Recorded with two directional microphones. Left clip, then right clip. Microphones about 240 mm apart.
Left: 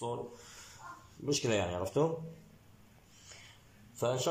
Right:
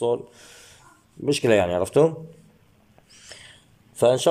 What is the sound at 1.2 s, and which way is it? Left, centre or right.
Speech, right.